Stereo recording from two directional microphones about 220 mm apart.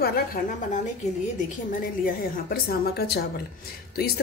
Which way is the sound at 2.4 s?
45° left (ahead or behind).